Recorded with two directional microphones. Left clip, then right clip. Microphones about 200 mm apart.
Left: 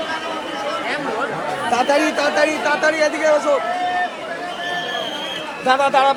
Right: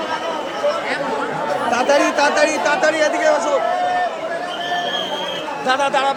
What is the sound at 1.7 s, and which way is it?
Chatter, 35° left (ahead or behind).